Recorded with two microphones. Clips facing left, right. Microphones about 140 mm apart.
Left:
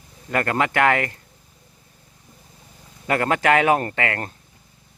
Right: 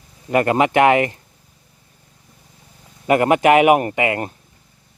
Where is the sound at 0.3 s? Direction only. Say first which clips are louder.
Right 6 dB; 20° right (ahead or behind).